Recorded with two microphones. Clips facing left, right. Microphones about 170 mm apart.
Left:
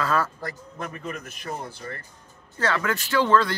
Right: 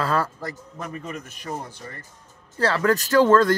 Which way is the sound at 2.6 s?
35° right (ahead or behind).